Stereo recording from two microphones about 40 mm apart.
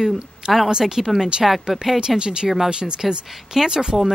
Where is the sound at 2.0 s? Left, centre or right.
Centre.